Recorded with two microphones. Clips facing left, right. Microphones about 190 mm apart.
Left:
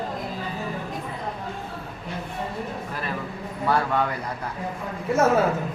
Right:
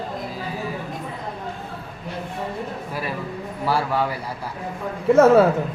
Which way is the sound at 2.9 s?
10° right (ahead or behind).